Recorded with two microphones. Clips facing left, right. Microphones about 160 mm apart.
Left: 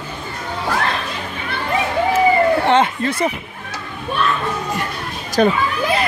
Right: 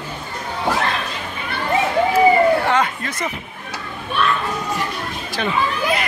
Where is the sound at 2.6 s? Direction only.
25° left (ahead or behind).